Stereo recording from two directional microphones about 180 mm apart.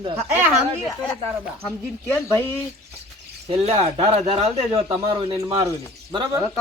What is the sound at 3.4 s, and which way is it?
Speech, 35° right (ahead or behind).